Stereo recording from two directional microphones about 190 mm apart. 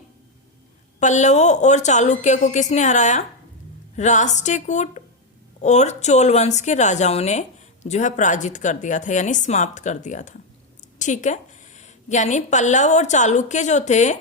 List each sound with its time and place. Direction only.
0.9 s a woman's voice: 40° left (ahead or behind)